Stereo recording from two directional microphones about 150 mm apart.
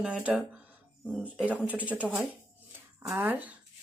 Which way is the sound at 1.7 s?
10° right (ahead or behind).